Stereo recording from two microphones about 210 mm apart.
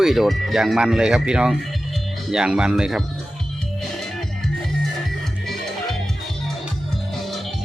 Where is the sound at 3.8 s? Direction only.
Centre (ahead or behind).